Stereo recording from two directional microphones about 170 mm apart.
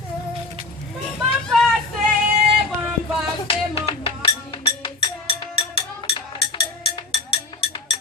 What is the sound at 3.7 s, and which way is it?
Music, 35° left (ahead or behind).